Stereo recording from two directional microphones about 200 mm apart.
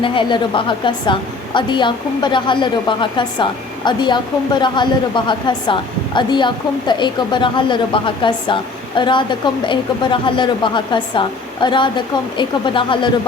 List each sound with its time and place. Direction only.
0.0 s a woman's voice: 25° left (ahead or behind)